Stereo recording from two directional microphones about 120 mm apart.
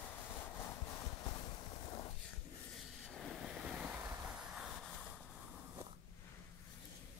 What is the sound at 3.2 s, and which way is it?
Waves, centre (ahead or behind).